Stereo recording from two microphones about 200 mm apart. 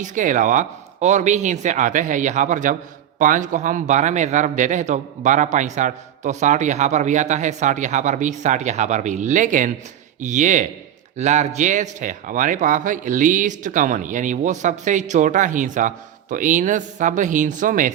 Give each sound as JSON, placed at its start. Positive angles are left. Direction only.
{"t": 0.0, "sound": "speech", "side_deg": -40}